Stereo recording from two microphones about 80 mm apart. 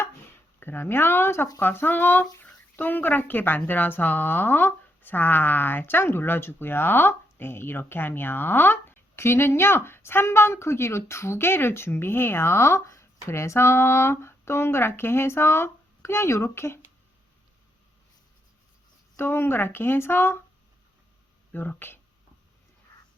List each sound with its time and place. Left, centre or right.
0.6 s speech: left
19.1 s speech: left
21.5 s speech: left